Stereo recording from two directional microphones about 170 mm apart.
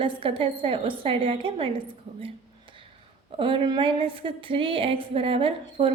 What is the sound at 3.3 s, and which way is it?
A woman's voice, 30° right (ahead or behind).